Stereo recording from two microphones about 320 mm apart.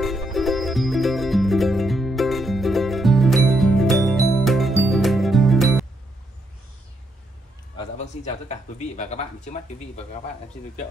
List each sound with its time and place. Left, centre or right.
0.0 s music: centre
7.7 s speech: left